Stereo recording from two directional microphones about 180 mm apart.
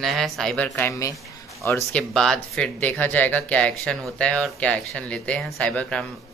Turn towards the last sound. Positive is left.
turn(degrees=5)  # may be behind; listen again after turning